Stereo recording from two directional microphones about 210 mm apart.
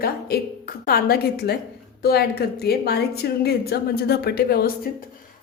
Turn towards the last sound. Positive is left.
turn(degrees=50)  # may be behind; listen again after turning